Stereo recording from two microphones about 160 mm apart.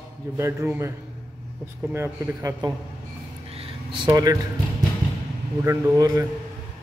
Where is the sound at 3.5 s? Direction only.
30° right (ahead or behind).